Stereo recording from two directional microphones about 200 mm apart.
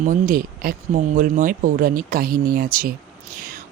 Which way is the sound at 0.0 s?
45° right (ahead or behind).